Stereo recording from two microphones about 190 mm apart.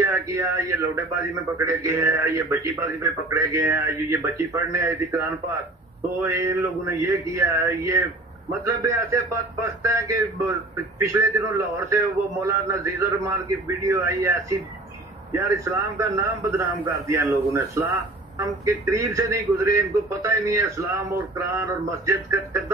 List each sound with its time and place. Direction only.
0.0 s a man's voice: 15° right (ahead or behind)
16.0 s a man's voice: 15° right (ahead or behind)